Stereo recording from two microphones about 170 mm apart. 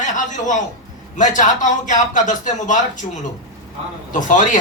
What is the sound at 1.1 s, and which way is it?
A man's voice, 45° left (ahead or behind).